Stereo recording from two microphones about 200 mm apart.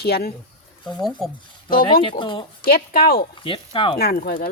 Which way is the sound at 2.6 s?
50° left (ahead or behind).